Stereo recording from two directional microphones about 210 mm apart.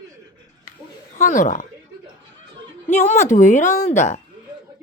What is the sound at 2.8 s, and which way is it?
A woman's voice, 35° left (ahead or behind).